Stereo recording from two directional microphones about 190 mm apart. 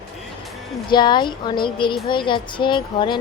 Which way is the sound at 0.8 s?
25° left (ahead or behind).